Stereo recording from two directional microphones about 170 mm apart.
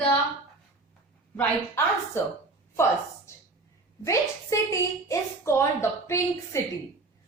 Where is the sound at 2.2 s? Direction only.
15° left (ahead or behind).